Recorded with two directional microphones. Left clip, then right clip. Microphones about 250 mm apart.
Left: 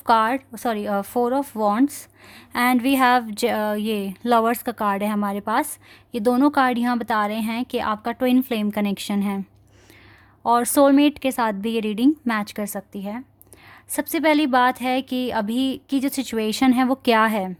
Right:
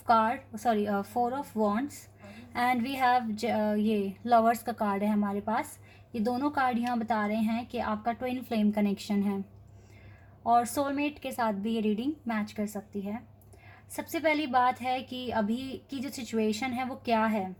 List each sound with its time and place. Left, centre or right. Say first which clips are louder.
0.1 s a woman's voice: left 7 dB; left
10.4 s a woman's voice: left 9 dB; left